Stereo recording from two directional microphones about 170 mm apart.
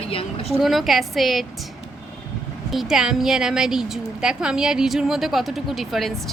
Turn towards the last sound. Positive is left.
turn(degrees=0)  # may be behind; listen again after turning